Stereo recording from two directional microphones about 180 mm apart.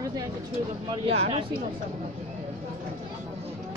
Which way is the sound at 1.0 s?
35° right (ahead or behind).